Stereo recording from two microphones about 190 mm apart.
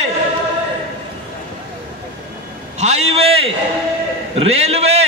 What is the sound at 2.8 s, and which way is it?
A man's voice, 35° right (ahead or behind).